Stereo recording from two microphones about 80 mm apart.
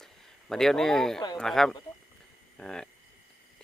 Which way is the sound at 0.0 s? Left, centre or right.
Centre.